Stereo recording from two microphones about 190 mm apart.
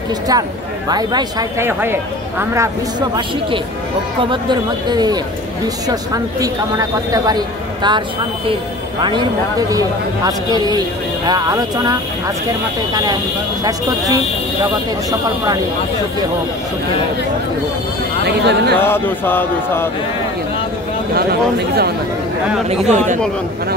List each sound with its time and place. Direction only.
0.3 s speech: 20° right (ahead or behind)
4.8 s speech: 20° right (ahead or behind)
9.0 s speech: 20° right (ahead or behind)
18.2 s speech: 60° right (ahead or behind)
18.8 s speech: 10° left (ahead or behind)
21.1 s speech: 55° right (ahead or behind)
22.7 s speech: 40° right (ahead or behind)